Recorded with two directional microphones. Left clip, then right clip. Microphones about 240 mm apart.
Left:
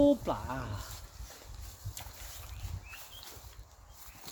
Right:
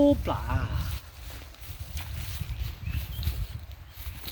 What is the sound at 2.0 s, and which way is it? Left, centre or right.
Boat, centre.